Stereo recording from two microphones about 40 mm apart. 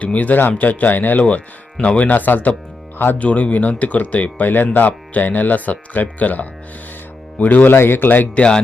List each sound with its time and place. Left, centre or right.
0.0 s speech: left
1.8 s speech: left
3.2 s speech: left
7.8 s speech: left
8.4 s speech: left